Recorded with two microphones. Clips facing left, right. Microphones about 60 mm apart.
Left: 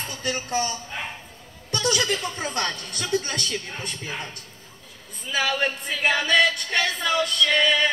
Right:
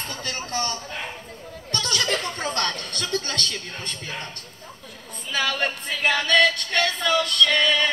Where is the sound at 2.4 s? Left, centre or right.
Centre.